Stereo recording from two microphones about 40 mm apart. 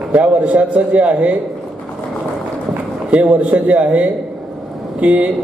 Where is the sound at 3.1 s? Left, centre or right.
Right.